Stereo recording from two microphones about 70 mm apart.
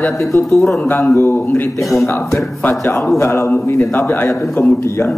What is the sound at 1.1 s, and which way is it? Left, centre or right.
A man's voice, left.